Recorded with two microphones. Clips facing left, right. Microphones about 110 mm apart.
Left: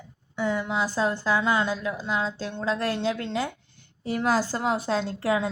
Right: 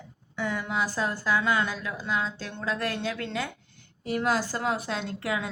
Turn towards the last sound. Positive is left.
turn(degrees=30)  # may be behind; listen again after turning